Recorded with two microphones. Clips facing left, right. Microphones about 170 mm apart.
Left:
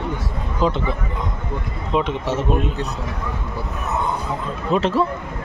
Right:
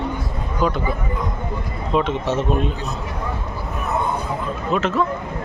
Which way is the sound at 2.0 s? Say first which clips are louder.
Right 1 dB; 10° left (ahead or behind).